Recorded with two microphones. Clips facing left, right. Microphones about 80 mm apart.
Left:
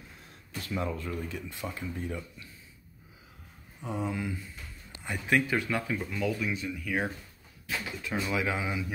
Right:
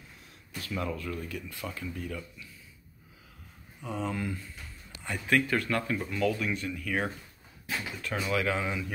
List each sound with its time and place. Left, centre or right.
0.6 s speech: left
3.8 s speech: left
4.1 s speech: centre
5.0 s speech: centre